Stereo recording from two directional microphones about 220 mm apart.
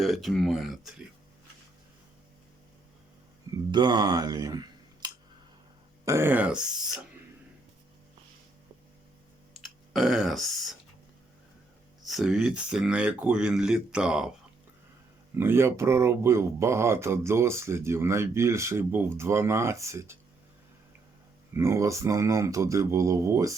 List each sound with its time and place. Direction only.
0.0 s speech: centre (ahead or behind)
3.7 s speech: 20° right (ahead or behind); by 7.0 s 5° right (ahead or behind)
9.5 s speech: centre (ahead or behind)
12.0 s speech: centre (ahead or behind)
15.4 s speech: 10° right (ahead or behind)
21.5 s speech: 10° right (ahead or behind)